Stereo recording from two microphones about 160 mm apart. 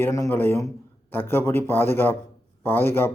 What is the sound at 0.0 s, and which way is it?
Speech, 15° left (ahead or behind).